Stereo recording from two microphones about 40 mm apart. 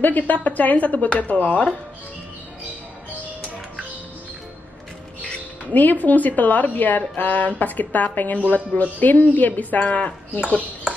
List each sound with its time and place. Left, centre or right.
0.0 s speech: left
5.2 s speech: left